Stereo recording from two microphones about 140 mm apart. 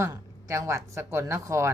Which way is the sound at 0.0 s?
20° right (ahead or behind).